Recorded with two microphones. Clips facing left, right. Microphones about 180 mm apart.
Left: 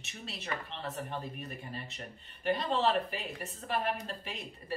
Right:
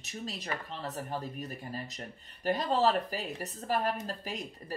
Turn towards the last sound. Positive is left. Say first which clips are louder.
# right 3 dB
turn(degrees=-40)  # may be behind; listen again after turning